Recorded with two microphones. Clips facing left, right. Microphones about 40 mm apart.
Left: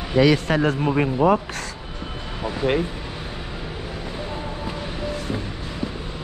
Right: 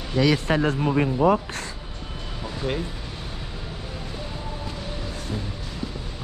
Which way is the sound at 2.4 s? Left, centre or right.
Left.